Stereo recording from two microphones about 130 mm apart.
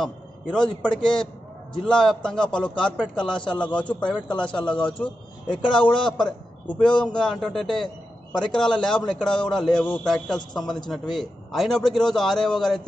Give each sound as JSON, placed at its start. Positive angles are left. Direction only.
{"t": 0.0, "sound": "a man's voice", "side_deg": 5}
{"t": 4.8, "sound": "a man's voice", "side_deg": 40}
{"t": 6.1, "sound": "a man's voice", "side_deg": 5}